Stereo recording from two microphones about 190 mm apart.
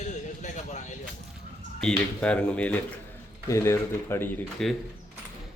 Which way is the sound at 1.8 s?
5° left (ahead or behind).